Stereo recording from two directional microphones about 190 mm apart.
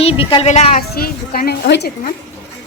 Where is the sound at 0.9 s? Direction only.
50° left (ahead or behind).